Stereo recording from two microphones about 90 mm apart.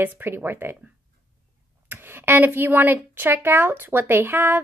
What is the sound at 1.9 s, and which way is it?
A woman's voice, 25° right (ahead or behind).